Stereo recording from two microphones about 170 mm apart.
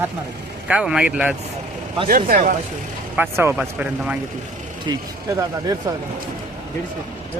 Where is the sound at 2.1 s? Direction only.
55° right (ahead or behind).